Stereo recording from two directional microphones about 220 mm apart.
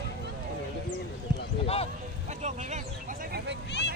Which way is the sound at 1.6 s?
25° left (ahead or behind).